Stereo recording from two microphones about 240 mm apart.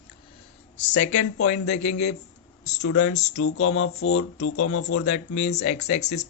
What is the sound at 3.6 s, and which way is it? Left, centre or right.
Speech, left.